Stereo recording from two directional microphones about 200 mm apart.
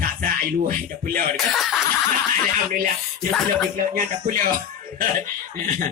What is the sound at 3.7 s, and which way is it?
Speech, 40° right (ahead or behind).